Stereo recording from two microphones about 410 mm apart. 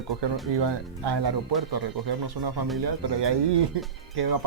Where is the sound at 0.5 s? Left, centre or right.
Right.